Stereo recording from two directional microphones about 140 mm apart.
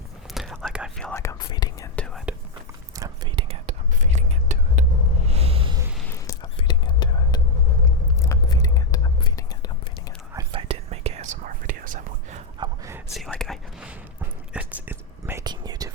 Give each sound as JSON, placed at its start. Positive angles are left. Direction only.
{"t": 0.3, "sound": "whispering", "side_deg": 0}
{"t": 1.1, "sound": "whispering", "side_deg": 20}
{"t": 2.0, "sound": "whispering", "side_deg": 5}
{"t": 2.9, "sound": "whispering", "side_deg": -25}
{"t": 3.3, "sound": "whispering", "side_deg": -40}
{"t": 4.0, "sound": "whispering", "side_deg": -55}
{"t": 6.4, "sound": "whispering", "side_deg": 35}
{"t": 8.2, "sound": "whispering", "side_deg": 20}
{"t": 10.5, "sound": "whispering", "side_deg": -40}
{"t": 12.5, "sound": "a sound", "side_deg": -30}
{"t": 13.1, "sound": "whispering", "side_deg": 0}
{"t": 15.4, "sound": "whispering", "side_deg": -30}